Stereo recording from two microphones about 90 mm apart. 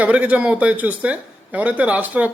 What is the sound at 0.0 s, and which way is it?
A man's voice, 15° right (ahead or behind).